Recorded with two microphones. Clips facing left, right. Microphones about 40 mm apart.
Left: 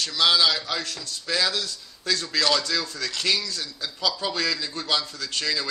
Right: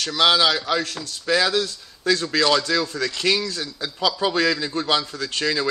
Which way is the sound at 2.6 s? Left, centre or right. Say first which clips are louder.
Right 6 dB; right.